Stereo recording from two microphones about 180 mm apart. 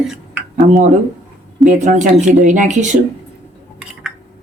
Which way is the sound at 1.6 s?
45° right (ahead or behind).